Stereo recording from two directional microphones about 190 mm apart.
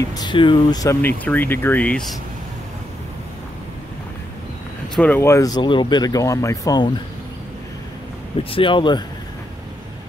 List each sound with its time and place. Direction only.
0.1 s speech: 25° left (ahead or behind); by 2.1 s 5° left (ahead or behind)
4.9 s speech: 10° left (ahead or behind)
8.5 s speech: 25° left (ahead or behind)